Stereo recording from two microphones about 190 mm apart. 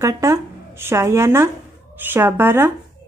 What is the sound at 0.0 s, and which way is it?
Speech, 15° right (ahead or behind).